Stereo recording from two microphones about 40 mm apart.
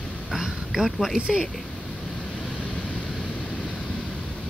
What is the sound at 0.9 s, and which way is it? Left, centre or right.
Speech, centre.